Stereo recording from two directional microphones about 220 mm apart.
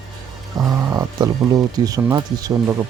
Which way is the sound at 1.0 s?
15° right (ahead or behind).